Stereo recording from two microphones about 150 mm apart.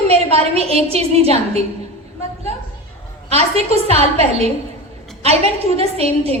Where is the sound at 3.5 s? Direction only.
45° right (ahead or behind).